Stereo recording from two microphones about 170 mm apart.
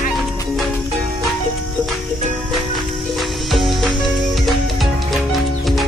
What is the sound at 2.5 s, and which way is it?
Music, centre (ahead or behind).